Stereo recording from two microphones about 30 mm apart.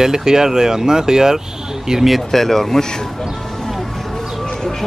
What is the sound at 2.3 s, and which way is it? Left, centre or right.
Speech, centre.